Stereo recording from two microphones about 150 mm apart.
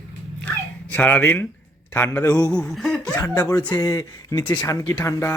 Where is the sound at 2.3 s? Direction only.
25° left (ahead or behind).